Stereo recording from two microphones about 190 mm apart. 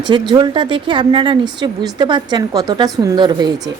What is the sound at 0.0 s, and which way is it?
A woman's voice, 25° right (ahead or behind).